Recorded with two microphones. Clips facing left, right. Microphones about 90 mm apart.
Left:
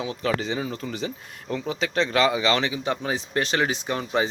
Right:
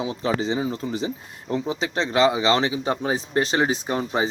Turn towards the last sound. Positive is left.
turn(degrees=-30)  # may be behind; listen again after turning